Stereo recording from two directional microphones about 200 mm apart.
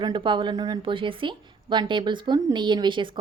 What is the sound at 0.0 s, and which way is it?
A woman's voice, 25° right (ahead or behind).